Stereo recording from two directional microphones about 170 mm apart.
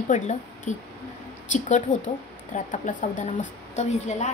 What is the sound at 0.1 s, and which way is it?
A woman's voice, 45° left (ahead or behind).